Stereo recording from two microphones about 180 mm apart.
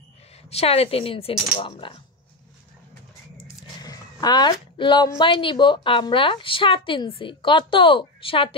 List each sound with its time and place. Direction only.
0.5 s speech: 35° left (ahead or behind)
3.3 s speech: 20° left (ahead or behind)